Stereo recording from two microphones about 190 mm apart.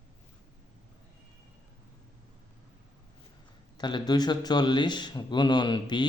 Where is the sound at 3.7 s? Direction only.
25° left (ahead or behind).